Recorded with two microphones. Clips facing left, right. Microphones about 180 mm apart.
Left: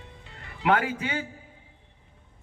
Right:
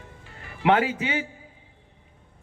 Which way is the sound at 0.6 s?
25° right (ahead or behind).